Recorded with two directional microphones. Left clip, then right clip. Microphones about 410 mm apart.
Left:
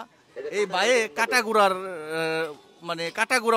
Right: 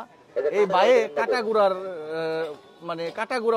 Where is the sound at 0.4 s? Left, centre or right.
Centre.